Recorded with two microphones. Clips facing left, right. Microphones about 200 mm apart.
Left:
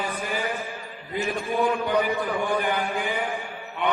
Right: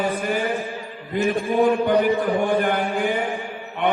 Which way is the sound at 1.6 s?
50° right (ahead or behind).